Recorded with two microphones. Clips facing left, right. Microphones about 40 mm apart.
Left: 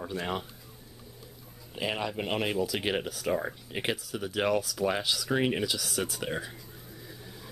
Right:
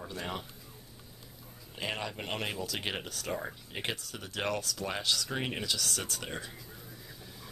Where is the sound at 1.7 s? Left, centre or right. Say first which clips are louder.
Left 5 dB; centre.